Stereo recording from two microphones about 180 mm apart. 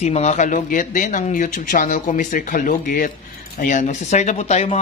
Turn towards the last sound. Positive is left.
turn(degrees=35)  # may be behind; listen again after turning